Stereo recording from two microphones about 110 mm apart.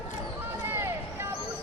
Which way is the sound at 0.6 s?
20° right (ahead or behind).